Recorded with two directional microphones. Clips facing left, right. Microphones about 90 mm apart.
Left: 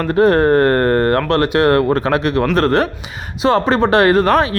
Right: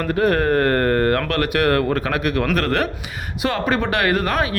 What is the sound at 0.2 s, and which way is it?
Speech, 30° left (ahead or behind).